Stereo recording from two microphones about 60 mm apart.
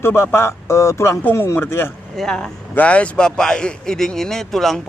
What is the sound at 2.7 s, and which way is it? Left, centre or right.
A man's voice, left.